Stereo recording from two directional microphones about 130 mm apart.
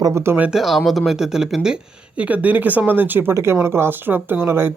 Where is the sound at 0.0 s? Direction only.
20° right (ahead or behind).